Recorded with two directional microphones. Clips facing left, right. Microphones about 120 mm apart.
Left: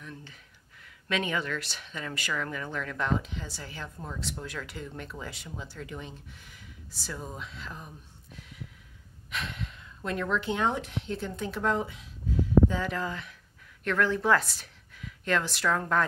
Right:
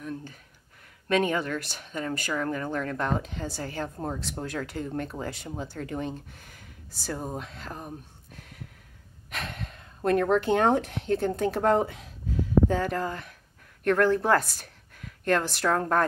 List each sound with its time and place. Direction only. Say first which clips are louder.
0.0 s a sound: right 9 dB; 45° right (ahead or behind)
0.8 s speech: right 6 dB; 45° right (ahead or behind)
8.4 s snort: even; 50° right (ahead or behind)
9.3 s a woman's voice: even; 45° right (ahead or behind)